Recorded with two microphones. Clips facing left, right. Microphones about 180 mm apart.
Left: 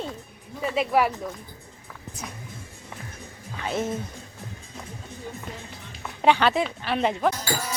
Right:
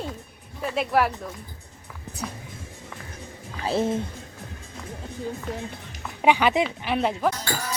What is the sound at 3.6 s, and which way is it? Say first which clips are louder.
Speech: right 4 dB; 30° right (ahead or behind).